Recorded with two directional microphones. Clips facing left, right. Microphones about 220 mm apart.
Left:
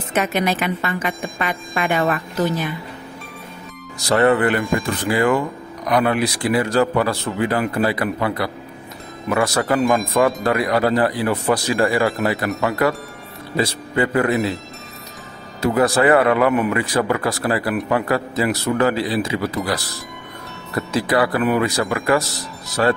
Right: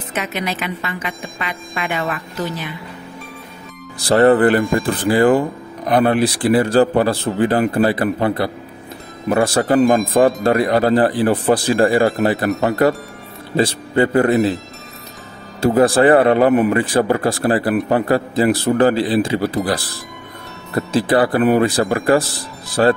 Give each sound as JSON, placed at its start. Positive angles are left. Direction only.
{"t": 0.1, "sound": "a woman's voice", "side_deg": 45}
{"t": 4.0, "sound": "a man's voice", "side_deg": -35}
{"t": 14.3, "sound": "speech", "side_deg": 0}
{"t": 15.6, "sound": "speech", "side_deg": -30}